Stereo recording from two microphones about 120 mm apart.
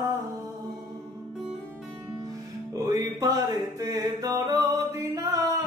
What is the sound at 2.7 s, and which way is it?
Music, 30° right (ahead or behind).